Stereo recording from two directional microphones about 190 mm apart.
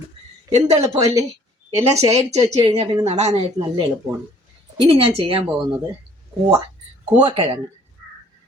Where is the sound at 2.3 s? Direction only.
35° right (ahead or behind).